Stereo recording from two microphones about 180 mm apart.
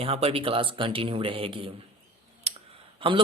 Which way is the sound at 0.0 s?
35° right (ahead or behind).